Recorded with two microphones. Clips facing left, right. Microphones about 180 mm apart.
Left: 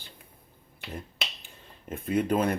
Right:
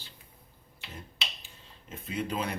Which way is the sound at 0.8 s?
55° left (ahead or behind).